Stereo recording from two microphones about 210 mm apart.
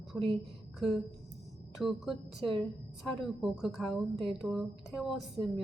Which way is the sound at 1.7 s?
Centre (ahead or behind).